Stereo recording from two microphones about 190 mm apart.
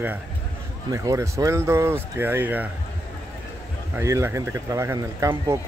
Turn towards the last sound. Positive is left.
turn(degrees=-15)  # may be behind; listen again after turning